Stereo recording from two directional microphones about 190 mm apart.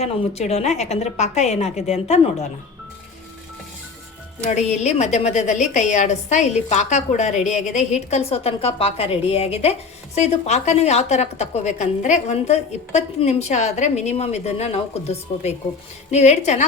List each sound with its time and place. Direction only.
0.0 s a woman's voice: 35° left (ahead or behind)
4.4 s a woman's voice: 35° left (ahead or behind)